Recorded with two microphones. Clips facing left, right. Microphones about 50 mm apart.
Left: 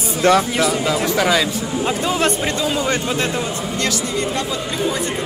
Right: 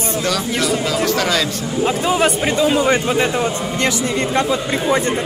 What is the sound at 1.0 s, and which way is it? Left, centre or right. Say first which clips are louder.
Speech: left 2 dB; centre.